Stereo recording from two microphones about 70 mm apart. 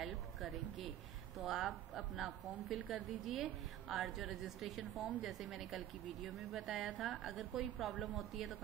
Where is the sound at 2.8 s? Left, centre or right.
Centre.